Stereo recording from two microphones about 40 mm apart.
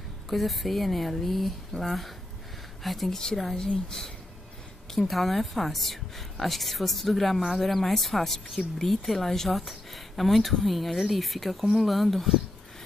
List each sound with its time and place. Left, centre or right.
0.3 s a woman's voice: centre
3.5 s speech: centre
4.9 s a woman's voice: centre